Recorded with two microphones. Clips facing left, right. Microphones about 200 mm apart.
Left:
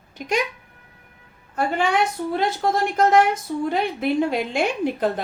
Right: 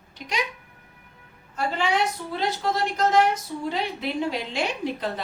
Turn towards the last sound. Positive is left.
turn(degrees=50)  # may be behind; listen again after turning